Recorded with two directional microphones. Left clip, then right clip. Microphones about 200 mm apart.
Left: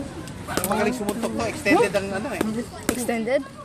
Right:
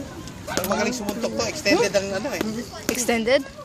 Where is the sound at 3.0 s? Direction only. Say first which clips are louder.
Right 4 dB; 20° right (ahead or behind).